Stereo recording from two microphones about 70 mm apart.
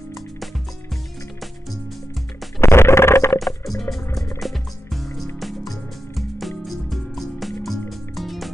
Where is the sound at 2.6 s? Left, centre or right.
Left.